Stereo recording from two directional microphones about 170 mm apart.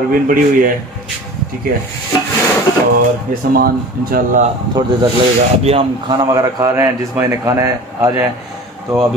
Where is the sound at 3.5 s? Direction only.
60° right (ahead or behind).